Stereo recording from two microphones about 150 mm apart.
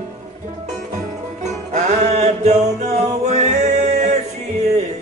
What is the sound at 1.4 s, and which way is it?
Music, 50° right (ahead or behind).